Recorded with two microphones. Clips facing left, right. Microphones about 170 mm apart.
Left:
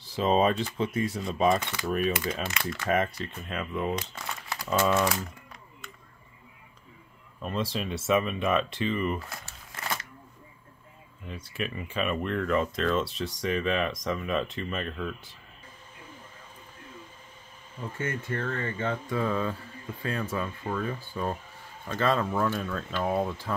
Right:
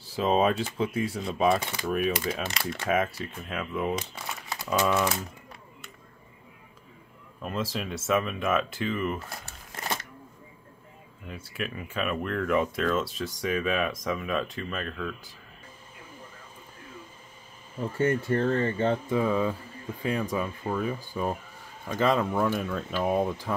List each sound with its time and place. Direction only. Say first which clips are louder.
0.1 s speech: even; 5° right (ahead or behind)
7.4 s speech: left 1 dB; centre (ahead or behind)
11.2 s speech: left 1 dB; 5° right (ahead or behind)
17.9 s speech: right 8 dB; 35° right (ahead or behind)
19.1 s speech: right 3 dB; 10° right (ahead or behind)